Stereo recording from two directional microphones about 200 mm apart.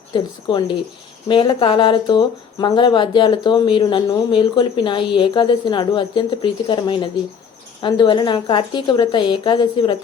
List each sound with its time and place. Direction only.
0.1 s speech: 25° left (ahead or behind)